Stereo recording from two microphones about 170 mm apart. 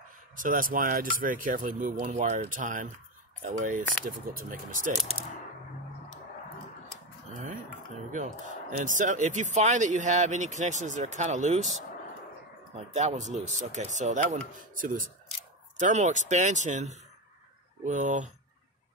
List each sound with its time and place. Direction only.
0.4 s speech: 55° right (ahead or behind)
8.8 s speech: 50° right (ahead or behind)
12.7 s speech: 45° right (ahead or behind)